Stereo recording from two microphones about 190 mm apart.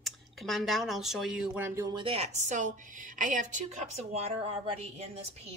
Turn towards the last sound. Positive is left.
turn(degrees=-35)  # may be behind; listen again after turning